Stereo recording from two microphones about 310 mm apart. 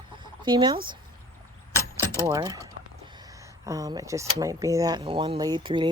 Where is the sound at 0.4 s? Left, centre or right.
Centre.